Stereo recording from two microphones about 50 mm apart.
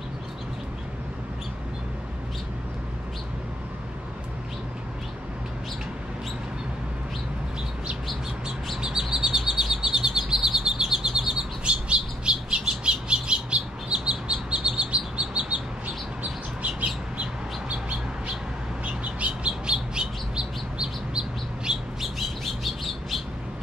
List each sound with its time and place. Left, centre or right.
8.8 s chirp: centre
17.2 s bird: right
22.0 s bird: centre